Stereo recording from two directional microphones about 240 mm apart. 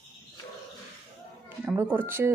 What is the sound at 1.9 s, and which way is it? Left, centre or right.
Speech, centre.